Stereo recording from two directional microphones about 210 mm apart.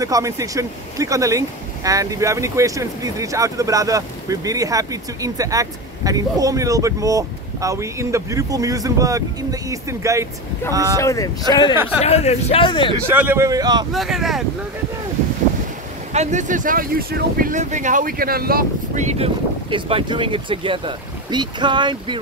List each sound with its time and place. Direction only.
0.0 s speech: 15° right (ahead or behind)
11.0 s speech: 15° left (ahead or behind)
12.0 s speech: 30° left (ahead or behind)
13.2 s speech: 10° right (ahead or behind)
13.9 s speech: centre (ahead or behind)
16.1 s speech: 35° right (ahead or behind)
19.1 s speech: 25° right (ahead or behind)